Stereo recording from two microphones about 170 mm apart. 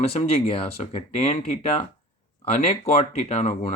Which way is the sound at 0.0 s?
35° left (ahead or behind).